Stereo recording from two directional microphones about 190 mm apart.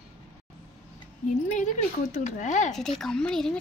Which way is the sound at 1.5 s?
40° left (ahead or behind).